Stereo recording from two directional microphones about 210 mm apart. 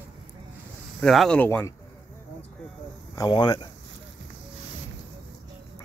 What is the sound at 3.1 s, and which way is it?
Speech, 20° left (ahead or behind).